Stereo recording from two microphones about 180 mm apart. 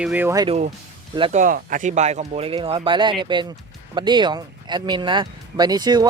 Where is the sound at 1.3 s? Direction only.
45° right (ahead or behind).